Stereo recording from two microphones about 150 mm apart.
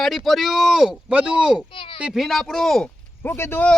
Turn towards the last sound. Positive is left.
turn(degrees=10)  # may be behind; listen again after turning